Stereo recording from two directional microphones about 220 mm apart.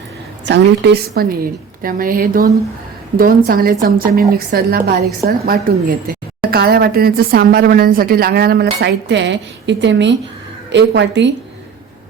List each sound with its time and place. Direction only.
0.4 s a woman's voice: 50° right (ahead or behind)